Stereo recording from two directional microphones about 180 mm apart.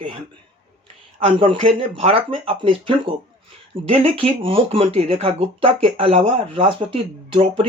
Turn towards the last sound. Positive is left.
turn(degrees=-30)  # may be behind; listen again after turning